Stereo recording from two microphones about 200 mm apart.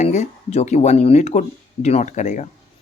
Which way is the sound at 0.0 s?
35° left (ahead or behind).